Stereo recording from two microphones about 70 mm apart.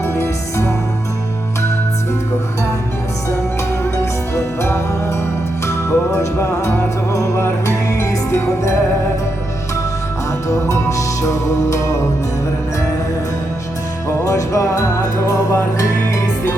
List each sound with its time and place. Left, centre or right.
0.0 s music: left
4.4 s music: left
10.5 s music: left
14.3 s music: left